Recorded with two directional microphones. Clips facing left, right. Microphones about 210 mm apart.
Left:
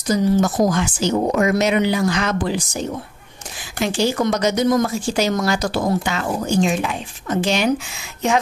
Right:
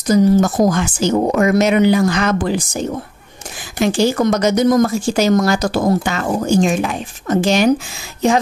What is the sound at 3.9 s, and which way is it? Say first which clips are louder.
Speech: right 3 dB; 45° right (ahead or behind).